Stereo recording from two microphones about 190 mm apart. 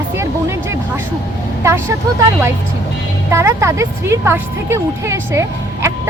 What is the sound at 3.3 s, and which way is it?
Speech, 15° right (ahead or behind).